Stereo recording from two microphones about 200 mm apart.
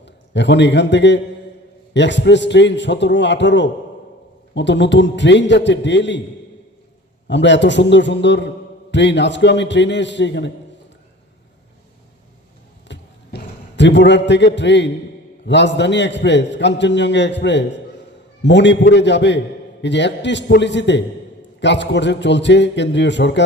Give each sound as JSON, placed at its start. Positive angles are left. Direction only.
{"t": 0.0, "sound": "a man's voice", "side_deg": 60}
{"t": 7.3, "sound": "a man's voice", "side_deg": 60}
{"t": 12.9, "sound": "a sound", "side_deg": 60}
{"t": 15.4, "sound": "a man's voice", "side_deg": 60}